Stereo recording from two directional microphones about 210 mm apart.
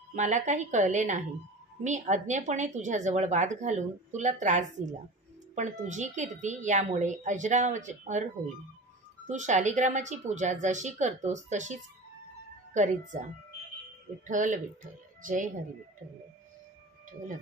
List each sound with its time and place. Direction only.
0.1 s a woman's voice: 35° right (ahead or behind)
9.3 s a woman's voice: 35° right (ahead or behind)
14.2 s a woman's voice: 35° right (ahead or behind)